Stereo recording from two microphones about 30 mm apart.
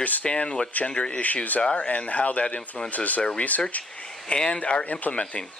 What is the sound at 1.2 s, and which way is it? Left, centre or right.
Speech, left.